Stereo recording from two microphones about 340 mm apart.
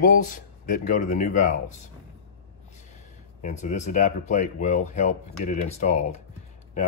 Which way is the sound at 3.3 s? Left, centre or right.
Left.